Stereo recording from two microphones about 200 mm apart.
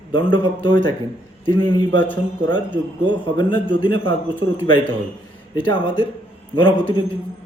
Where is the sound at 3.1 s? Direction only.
25° left (ahead or behind).